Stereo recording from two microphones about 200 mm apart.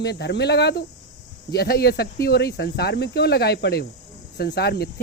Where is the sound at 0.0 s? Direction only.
55° left (ahead or behind).